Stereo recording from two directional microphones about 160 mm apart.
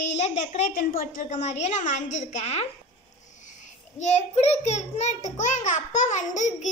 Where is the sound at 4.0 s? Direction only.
45° left (ahead or behind).